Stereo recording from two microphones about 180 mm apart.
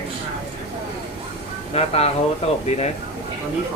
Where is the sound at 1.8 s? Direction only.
35° left (ahead or behind).